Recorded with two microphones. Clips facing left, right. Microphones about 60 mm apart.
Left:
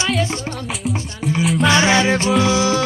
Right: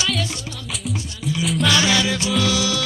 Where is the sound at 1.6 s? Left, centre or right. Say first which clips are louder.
Left 4 dB; left.